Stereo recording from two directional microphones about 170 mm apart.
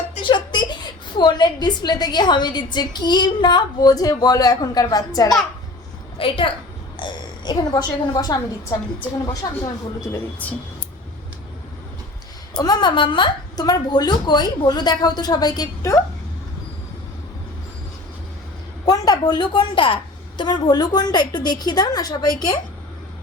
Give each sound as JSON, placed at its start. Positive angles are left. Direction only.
{"t": 0.1, "sound": "a woman's voice", "side_deg": 30}
{"t": 10.4, "sound": "speech", "side_deg": 10}
{"t": 12.5, "sound": "a woman's voice", "side_deg": 25}
{"t": 18.9, "sound": "a woman's voice", "side_deg": 20}